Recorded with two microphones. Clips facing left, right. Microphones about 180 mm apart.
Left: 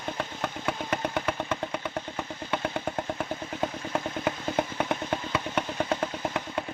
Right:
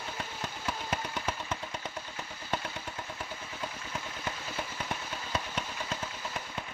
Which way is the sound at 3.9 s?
60° left (ahead or behind).